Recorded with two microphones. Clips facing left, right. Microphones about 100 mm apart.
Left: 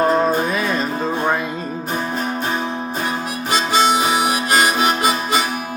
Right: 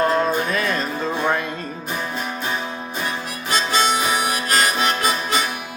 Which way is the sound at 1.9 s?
40° left (ahead or behind).